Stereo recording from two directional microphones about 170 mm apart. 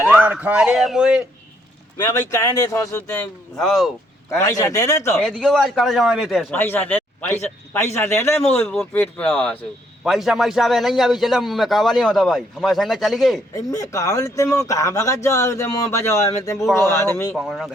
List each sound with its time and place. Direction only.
0.1 s a man's voice: 5° right (ahead or behind)
2.0 s speech: 20° left (ahead or behind)
3.5 s a man's voice: centre (ahead or behind)
4.3 s speech: 15° left (ahead or behind)
5.1 s a man's voice: centre (ahead or behind)
6.5 s speech: 10° left (ahead or behind)
8.5 s a man's voice: centre (ahead or behind)
13.5 s speech: 20° left (ahead or behind)
17.3 s a man's voice: centre (ahead or behind)